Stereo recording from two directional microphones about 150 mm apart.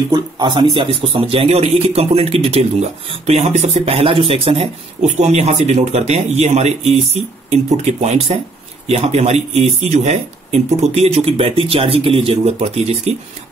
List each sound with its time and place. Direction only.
0.1 s a man's voice: 30° right (ahead or behind)